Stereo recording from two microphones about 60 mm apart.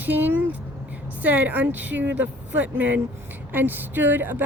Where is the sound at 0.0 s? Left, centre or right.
Right.